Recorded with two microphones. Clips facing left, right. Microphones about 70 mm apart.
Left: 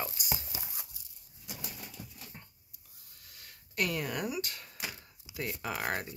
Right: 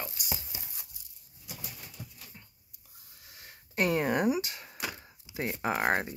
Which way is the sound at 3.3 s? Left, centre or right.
Right.